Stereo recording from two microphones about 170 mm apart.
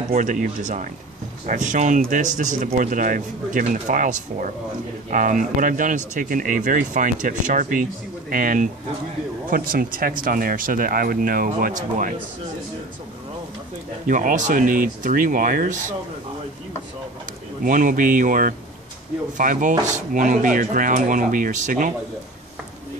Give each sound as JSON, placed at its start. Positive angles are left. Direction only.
{"t": 0.1, "sound": "speech", "side_deg": -50}
{"t": 14.0, "sound": "speech", "side_deg": -50}
{"t": 17.6, "sound": "speech", "side_deg": -50}